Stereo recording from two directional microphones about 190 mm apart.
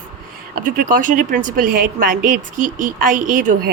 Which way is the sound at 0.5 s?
45° right (ahead or behind).